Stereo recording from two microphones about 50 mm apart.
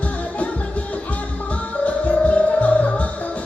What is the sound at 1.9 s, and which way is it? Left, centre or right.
Music, left.